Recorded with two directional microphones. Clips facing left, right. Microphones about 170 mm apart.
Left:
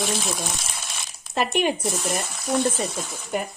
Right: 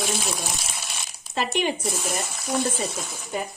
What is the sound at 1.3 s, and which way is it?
Speech, 50° left (ahead or behind).